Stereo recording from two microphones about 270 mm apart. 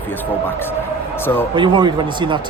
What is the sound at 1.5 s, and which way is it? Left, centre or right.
Speech, centre.